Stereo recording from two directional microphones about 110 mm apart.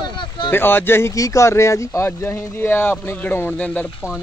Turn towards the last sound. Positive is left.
turn(degrees=15)  # may be behind; listen again after turning